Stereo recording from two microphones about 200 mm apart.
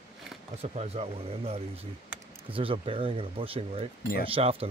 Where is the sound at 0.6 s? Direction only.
30° right (ahead or behind).